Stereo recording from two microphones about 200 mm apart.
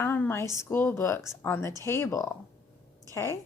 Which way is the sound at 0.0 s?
10° left (ahead or behind).